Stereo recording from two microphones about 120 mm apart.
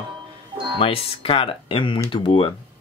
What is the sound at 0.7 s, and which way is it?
Speech, 50° left (ahead or behind).